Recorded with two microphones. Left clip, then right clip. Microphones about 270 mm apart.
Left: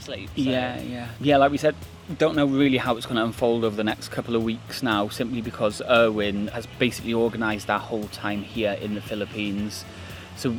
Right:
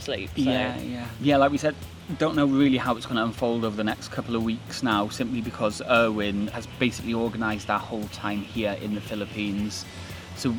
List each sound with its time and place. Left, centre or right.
0.5 s speech: left
6.7 s speech: left
9.0 s speech: left